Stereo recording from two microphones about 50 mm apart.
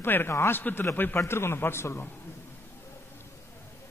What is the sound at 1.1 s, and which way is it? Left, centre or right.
Speech, left.